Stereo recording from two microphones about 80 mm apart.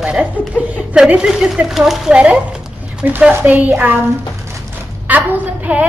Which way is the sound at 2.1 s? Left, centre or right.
Centre.